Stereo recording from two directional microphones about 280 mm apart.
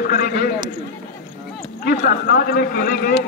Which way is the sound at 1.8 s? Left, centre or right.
Left.